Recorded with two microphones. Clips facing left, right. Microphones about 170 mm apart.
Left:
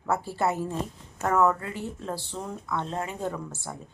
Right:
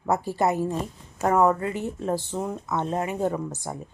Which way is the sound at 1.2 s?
25° right (ahead or behind).